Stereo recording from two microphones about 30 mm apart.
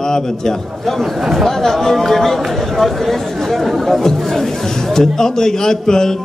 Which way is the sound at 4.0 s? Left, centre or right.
Centre.